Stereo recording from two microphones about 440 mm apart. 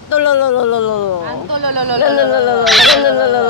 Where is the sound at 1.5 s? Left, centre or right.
Right.